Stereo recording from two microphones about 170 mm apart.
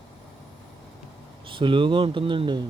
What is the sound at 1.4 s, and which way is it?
Speech, 30° right (ahead or behind).